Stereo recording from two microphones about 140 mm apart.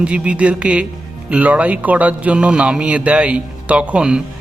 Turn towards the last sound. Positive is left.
turn(degrees=-5)  # may be behind; listen again after turning